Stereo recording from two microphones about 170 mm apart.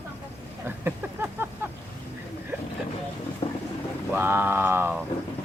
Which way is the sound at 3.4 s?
35° left (ahead or behind).